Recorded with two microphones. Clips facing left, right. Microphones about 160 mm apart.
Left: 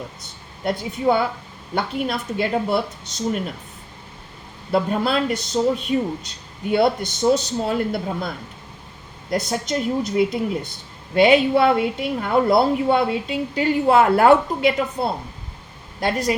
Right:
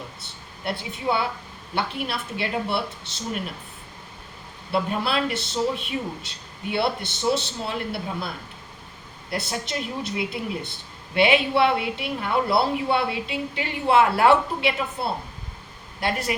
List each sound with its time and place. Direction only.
0.6 s a woman's voice: 45° left (ahead or behind)
4.7 s a woman's voice: 40° left (ahead or behind)
9.3 s a woman's voice: 40° left (ahead or behind)